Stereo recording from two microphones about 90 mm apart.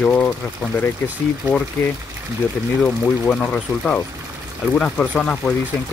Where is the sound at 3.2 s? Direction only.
15° left (ahead or behind).